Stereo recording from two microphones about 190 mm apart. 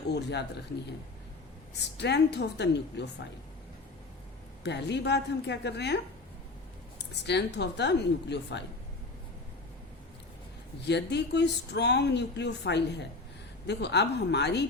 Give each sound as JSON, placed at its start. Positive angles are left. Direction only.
{"t": 0.1, "sound": "speech", "side_deg": 60}
{"t": 2.0, "sound": "speech", "side_deg": 65}
{"t": 4.6, "sound": "speech", "side_deg": 65}
{"t": 7.3, "sound": "speech", "side_deg": 60}
{"t": 10.8, "sound": "speech", "side_deg": 65}